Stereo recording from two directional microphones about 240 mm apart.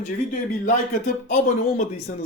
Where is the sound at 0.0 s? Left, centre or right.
Left.